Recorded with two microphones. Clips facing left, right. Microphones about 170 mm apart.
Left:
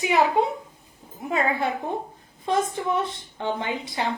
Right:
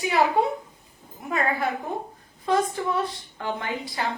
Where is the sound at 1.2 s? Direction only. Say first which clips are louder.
Left 1 dB; 25° left (ahead or behind).